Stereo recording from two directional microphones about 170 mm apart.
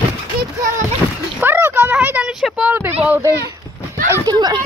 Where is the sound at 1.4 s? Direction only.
10° right (ahead or behind).